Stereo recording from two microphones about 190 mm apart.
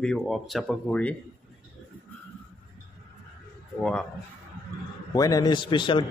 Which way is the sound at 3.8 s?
5° left (ahead or behind).